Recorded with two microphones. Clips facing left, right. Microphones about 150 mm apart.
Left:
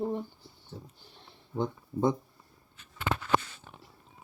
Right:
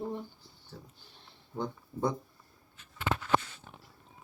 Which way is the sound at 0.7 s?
20° left (ahead or behind).